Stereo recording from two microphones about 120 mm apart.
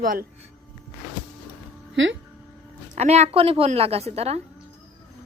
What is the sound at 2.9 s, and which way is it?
A woman's voice, 70° right (ahead or behind).